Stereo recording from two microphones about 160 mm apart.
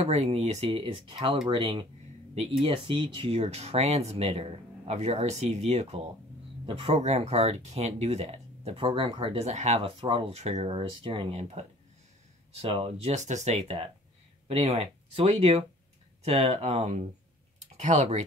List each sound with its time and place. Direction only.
0.0 s speech: 40° right (ahead or behind)
0.7 s speech: 30° right (ahead or behind); by 18.2 s 45° right (ahead or behind)